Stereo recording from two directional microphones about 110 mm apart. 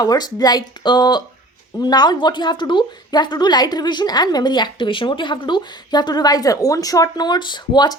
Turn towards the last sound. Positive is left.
turn(degrees=40)  # may be behind; listen again after turning